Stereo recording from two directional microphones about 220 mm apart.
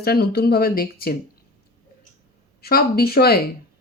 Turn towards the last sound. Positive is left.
turn(degrees=45)  # may be behind; listen again after turning